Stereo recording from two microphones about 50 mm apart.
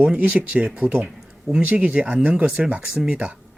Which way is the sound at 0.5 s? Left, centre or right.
Centre.